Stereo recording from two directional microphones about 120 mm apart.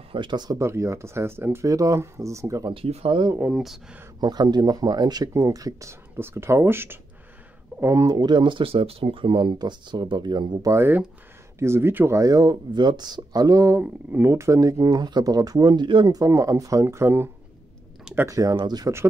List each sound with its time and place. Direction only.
0.1 s speech: 40° right (ahead or behind)
0.6 s speech: 25° right (ahead or behind)
2.7 s speech: 55° right (ahead or behind)
3.3 s speech: 5° right (ahead or behind)
4.2 s speech: 35° right (ahead or behind)
8.2 s speech: 40° right (ahead or behind)
10.7 s speech: 20° right (ahead or behind); by 18.9 s 35° right (ahead or behind)